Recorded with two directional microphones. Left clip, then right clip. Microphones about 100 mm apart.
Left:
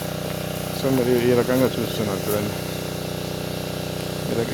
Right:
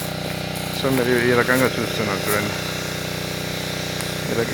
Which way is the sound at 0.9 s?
25° left (ahead or behind).